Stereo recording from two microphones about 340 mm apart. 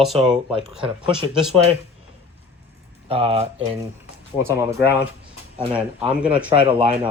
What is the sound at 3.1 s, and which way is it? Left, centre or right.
Speech, centre.